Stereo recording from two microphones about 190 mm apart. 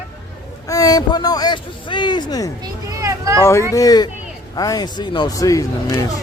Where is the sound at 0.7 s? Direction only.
20° left (ahead or behind).